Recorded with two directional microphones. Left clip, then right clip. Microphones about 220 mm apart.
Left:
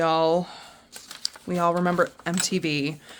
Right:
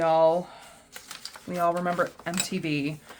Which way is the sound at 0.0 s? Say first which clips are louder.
Even; 50° left (ahead or behind).